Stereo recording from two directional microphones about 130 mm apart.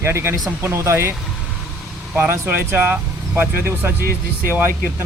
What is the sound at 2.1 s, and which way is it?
Speech, 15° right (ahead or behind).